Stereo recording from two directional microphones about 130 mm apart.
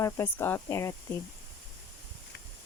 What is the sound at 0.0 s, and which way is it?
Speech, 20° left (ahead or behind).